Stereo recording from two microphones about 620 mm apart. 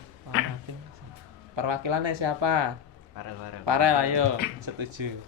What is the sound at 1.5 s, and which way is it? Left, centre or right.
Speech, right.